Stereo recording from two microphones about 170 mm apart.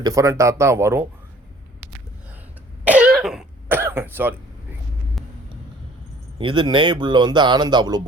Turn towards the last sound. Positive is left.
turn(degrees=-25)  # may be behind; listen again after turning